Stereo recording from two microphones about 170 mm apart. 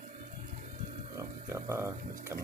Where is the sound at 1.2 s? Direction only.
15° right (ahead or behind).